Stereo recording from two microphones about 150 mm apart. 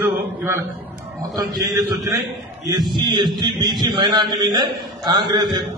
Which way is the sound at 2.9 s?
30° right (ahead or behind).